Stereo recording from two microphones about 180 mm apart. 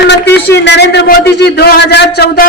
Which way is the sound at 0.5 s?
75° left (ahead or behind).